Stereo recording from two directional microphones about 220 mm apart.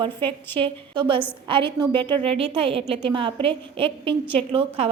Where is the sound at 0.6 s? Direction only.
20° right (ahead or behind).